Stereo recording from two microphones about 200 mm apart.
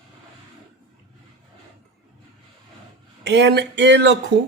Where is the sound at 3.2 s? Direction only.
60° right (ahead or behind).